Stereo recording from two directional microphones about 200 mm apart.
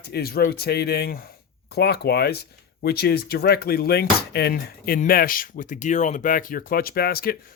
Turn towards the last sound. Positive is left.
turn(degrees=50)  # may be behind; listen again after turning